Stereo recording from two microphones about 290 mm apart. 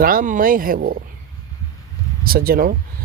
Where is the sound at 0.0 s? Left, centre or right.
Right.